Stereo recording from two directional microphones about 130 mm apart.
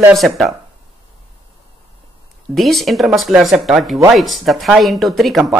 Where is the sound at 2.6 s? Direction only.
Centre (ahead or behind).